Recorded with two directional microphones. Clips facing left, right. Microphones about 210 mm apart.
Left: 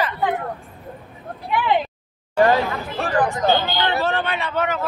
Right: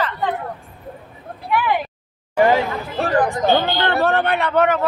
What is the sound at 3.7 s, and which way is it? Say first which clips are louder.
Speech: right 3 dB; 55° right (ahead or behind).